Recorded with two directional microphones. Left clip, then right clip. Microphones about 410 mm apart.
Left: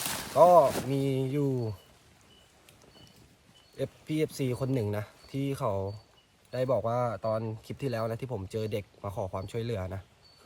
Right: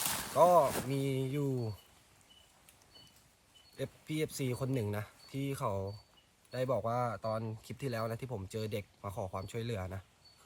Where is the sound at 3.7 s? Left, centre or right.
Centre.